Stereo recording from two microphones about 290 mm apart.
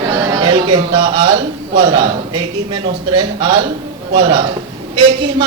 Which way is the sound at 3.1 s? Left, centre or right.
Centre.